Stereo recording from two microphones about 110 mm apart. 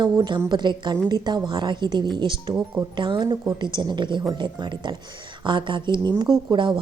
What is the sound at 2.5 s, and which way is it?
Speech, 25° right (ahead or behind).